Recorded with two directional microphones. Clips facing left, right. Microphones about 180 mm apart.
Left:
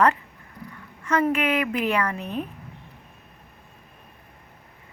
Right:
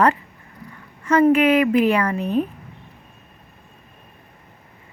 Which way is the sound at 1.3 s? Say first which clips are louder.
Right 8 dB; 30° right (ahead or behind).